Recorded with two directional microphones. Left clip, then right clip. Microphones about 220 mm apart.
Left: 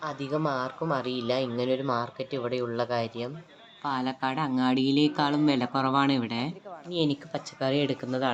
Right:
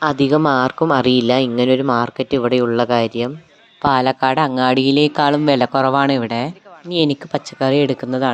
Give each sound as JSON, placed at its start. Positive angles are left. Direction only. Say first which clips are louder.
{"t": 0.0, "sound": "speech", "louder": "right 15 dB", "side_deg": -45}